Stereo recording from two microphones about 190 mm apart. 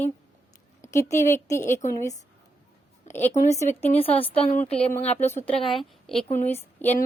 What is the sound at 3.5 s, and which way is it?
A woman's voice, 35° left (ahead or behind).